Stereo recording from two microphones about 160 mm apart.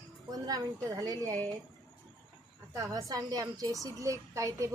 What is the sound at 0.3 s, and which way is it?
A woman's voice, 25° right (ahead or behind).